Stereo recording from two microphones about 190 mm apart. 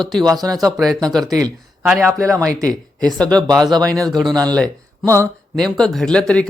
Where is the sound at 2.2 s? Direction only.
15° right (ahead or behind).